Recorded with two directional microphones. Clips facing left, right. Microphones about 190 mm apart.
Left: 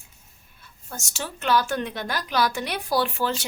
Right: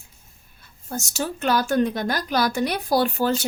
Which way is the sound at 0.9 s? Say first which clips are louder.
Right 7 dB; 40° right (ahead or behind).